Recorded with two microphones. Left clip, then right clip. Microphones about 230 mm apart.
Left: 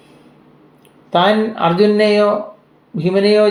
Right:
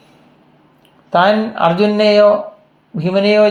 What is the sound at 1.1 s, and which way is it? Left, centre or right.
Speech, right.